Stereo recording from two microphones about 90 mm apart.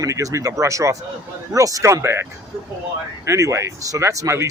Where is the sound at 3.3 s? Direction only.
35° right (ahead or behind).